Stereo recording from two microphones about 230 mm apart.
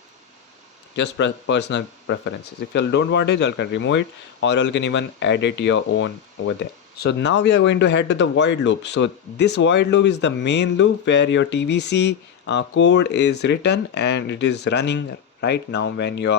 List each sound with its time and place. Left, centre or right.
0.9 s speech: left